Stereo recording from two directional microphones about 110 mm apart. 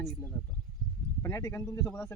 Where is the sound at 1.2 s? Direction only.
25° left (ahead or behind).